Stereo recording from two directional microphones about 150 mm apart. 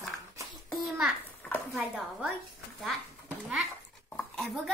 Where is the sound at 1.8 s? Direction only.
5° right (ahead or behind).